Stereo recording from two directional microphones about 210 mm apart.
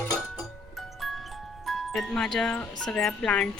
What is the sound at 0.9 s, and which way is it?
Speech, centre (ahead or behind).